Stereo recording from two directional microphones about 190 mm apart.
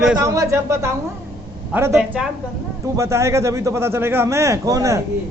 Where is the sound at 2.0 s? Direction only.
5° right (ahead or behind).